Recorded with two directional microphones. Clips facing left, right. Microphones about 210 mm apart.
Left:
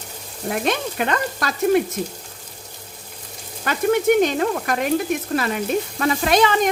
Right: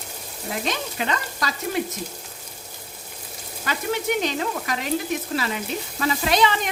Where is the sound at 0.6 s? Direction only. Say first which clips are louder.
Left 5 dB; 55° left (ahead or behind).